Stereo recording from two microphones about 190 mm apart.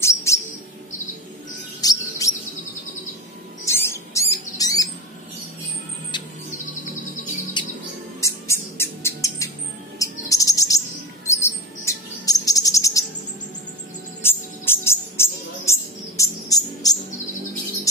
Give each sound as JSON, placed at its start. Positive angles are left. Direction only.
{"t": 0.0, "sound": "chirp", "side_deg": 15}
{"t": 1.8, "sound": "chirp", "side_deg": 20}
{"t": 3.6, "sound": "rodents", "side_deg": 15}
{"t": 6.1, "sound": "music", "side_deg": 25}
{"t": 7.6, "sound": "bird", "side_deg": 25}
{"t": 8.2, "sound": "music", "side_deg": 15}
{"t": 9.9, "sound": "chirp", "side_deg": 15}
{"t": 11.2, "sound": "bird", "side_deg": 15}
{"t": 14.2, "sound": "music", "side_deg": 10}